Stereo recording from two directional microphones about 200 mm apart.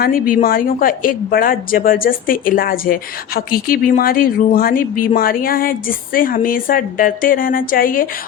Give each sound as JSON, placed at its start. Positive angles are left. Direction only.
{"t": 0.0, "sound": "speech", "side_deg": 45}